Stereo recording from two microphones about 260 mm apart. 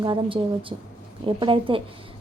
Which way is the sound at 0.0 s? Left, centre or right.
Centre.